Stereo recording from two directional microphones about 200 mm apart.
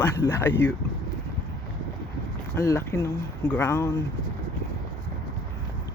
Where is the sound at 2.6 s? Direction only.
15° left (ahead or behind).